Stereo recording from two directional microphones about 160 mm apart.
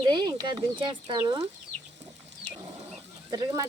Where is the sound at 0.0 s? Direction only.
25° right (ahead or behind).